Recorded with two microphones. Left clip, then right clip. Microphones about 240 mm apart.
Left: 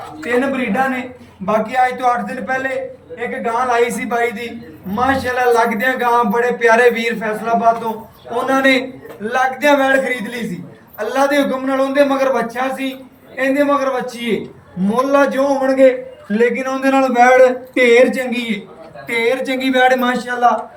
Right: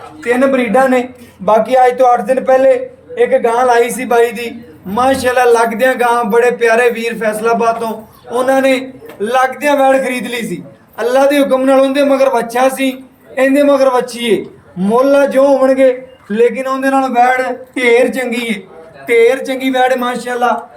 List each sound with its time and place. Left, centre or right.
0.5 s a man's voice: right